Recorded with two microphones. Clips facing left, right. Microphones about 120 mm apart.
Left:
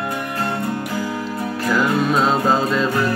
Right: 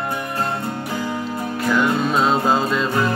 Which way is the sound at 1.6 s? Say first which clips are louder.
Even; 5° left (ahead or behind).